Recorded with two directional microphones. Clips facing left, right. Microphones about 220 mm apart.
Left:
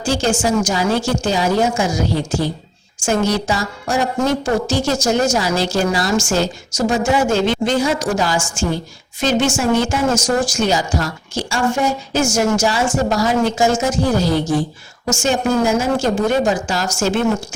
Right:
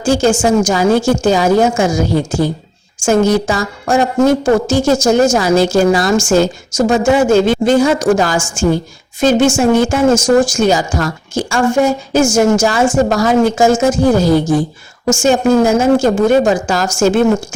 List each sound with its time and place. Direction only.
0.0 s a woman's voice: 50° right (ahead or behind)